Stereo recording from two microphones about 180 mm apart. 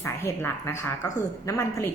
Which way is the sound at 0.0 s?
15° left (ahead or behind).